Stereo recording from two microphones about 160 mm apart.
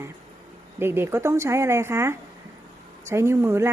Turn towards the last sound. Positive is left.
turn(degrees=-15)  # may be behind; listen again after turning